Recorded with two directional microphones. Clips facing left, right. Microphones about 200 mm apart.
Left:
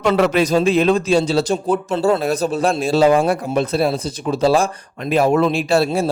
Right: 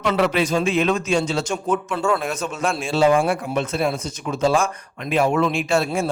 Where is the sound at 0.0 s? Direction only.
45° left (ahead or behind).